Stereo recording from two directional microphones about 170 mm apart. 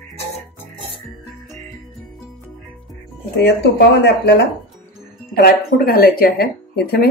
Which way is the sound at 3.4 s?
85° left.